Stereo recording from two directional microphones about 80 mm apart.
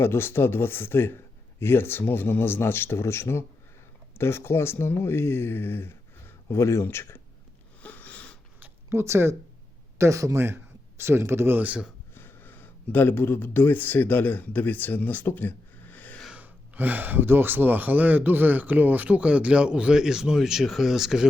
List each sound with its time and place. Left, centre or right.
0.0 s a man's voice: left
7.8 s sniff: centre
8.9 s speech: right
12.1 s speech: left
16.3 s speech: right; by 21.2 s centre